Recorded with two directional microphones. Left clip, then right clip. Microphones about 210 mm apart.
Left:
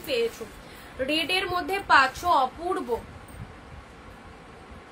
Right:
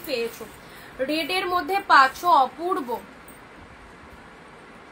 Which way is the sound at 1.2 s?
20° left (ahead or behind).